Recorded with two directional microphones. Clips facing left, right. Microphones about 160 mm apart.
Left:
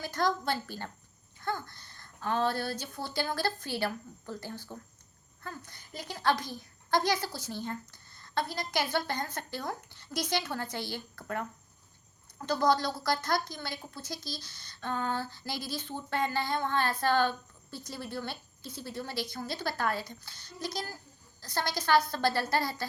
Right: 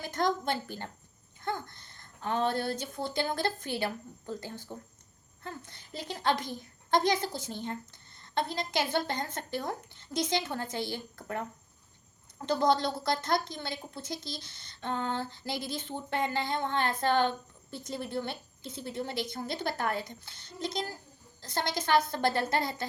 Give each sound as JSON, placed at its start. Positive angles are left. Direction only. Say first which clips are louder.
{"t": 0.0, "sound": "a woman's voice", "louder": "even", "side_deg": -20}